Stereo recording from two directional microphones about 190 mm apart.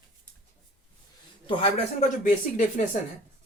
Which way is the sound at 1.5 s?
35° left (ahead or behind).